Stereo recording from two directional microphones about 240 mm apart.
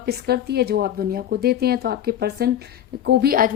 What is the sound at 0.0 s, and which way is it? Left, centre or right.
Speech, right.